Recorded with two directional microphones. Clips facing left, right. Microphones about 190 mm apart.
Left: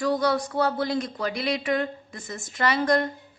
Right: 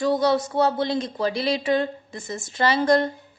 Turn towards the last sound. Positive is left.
turn(degrees=-30)  # may be behind; listen again after turning